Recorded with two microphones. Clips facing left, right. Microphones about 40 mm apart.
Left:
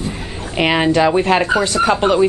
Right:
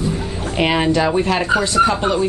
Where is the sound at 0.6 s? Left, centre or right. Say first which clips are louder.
Left 2 dB; centre.